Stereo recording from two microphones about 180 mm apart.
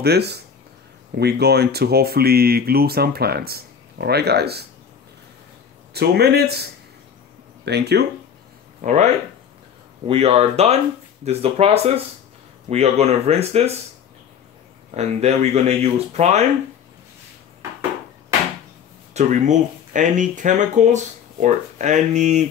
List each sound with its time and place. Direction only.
0.0 s speech: 65° right (ahead or behind)
5.9 s speech: 65° right (ahead or behind)
8.8 s speech: 40° right (ahead or behind)
15.0 s speech: 35° right (ahead or behind)
19.1 s speech: 45° right (ahead or behind)